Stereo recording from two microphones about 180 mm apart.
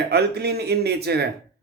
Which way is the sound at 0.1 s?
65° right (ahead or behind).